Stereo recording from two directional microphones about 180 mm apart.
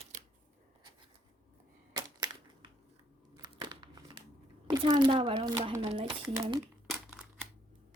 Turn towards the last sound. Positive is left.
turn(degrees=-30)  # may be behind; listen again after turning